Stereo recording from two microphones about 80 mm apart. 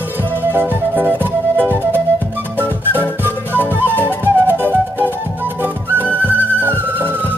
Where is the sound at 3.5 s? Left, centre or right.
Right.